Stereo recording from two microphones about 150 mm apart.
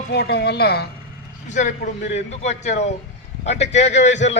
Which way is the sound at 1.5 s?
55° left (ahead or behind).